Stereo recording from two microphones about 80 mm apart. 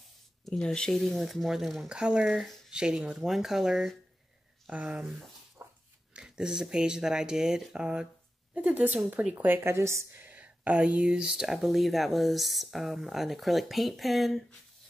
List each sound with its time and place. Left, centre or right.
0.5 s speech: centre
4.6 s speech: centre
5.6 s dog: right
6.1 s speech: centre; by 10.2 s right
10.2 s speech: centre